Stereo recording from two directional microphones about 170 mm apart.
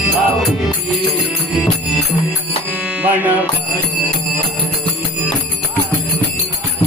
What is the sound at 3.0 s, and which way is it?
Music, 10° right (ahead or behind).